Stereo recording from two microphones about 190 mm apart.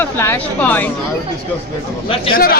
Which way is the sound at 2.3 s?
50° left (ahead or behind).